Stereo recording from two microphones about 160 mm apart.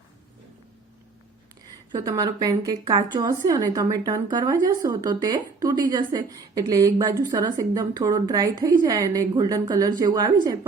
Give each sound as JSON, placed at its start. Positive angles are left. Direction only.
{"t": 1.9, "sound": "a woman's voice", "side_deg": -25}